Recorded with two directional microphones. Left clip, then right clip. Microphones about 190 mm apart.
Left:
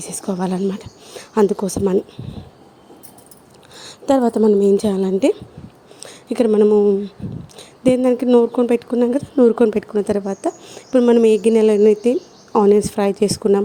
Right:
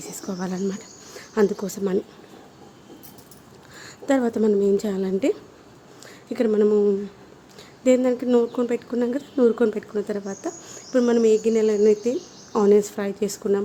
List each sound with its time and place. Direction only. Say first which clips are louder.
0.0 s speech: left 8 dB; 30° left (ahead or behind)
3.8 s a sound: left 6 dB; 30° left (ahead or behind)
4.6 s a woman's voice: left 6 dB; 30° left (ahead or behind)